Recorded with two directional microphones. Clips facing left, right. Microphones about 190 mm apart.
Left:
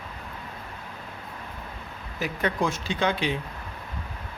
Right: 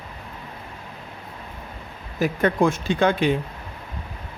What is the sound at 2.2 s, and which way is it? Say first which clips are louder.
Speech: right 7 dB; 50° right (ahead or behind).